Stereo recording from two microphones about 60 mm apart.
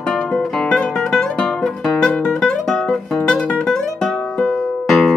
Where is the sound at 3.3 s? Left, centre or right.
Left.